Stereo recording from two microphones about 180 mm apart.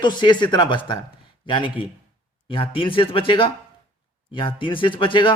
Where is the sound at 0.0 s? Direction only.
25° left (ahead or behind).